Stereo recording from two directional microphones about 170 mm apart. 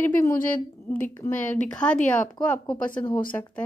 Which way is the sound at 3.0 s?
30° left (ahead or behind).